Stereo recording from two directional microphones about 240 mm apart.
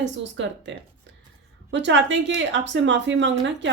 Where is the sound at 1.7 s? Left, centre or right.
Right.